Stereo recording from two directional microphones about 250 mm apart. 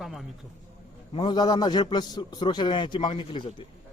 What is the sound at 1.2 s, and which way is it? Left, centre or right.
A man's voice, centre.